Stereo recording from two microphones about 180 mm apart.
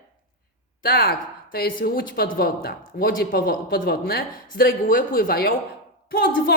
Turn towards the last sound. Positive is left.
turn(degrees=55)  # may be behind; listen again after turning